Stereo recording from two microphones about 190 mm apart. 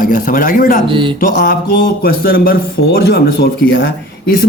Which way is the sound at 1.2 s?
50° left (ahead or behind).